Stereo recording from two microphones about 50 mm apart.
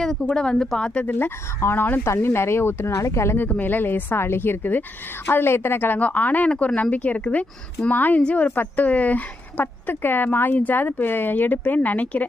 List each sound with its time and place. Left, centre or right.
0.0 s speech: centre; by 1.1 s left
1.2 s speech: left
2.0 s speech: left
2.9 s speech: left
3.3 s speech: left
8.2 s speech: left
8.4 s speech: left